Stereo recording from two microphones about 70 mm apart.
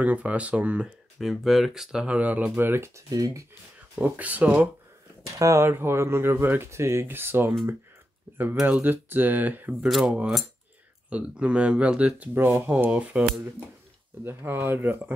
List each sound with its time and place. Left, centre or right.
0.0 s speech: right
1.2 s speech: centre; by 2.9 s right
3.1 s speech: right
4.0 s speech: right
5.2 s speech: right
5.7 s speech: right
8.3 s cutlery: right
8.8 s speech: right
9.8 s cutlery: centre
11.1 s speech: centre
12.4 s speech: right
14.2 s speech: right